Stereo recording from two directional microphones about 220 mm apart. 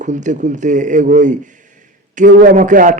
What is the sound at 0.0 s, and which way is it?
A man's voice, 35° right (ahead or behind).